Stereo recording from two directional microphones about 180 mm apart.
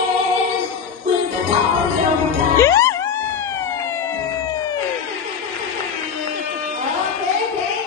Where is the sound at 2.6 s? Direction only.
15° left (ahead or behind).